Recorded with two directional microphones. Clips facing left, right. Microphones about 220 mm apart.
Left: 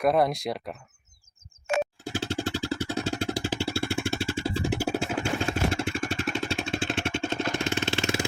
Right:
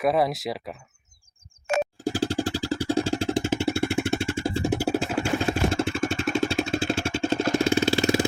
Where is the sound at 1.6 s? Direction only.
40° right (ahead or behind); by 4.2 s 20° right (ahead or behind).